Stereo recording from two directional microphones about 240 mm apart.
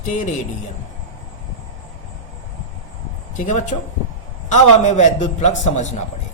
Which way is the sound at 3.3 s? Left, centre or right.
Left.